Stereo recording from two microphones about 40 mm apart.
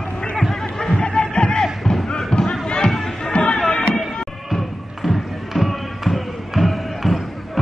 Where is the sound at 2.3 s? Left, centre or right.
Centre.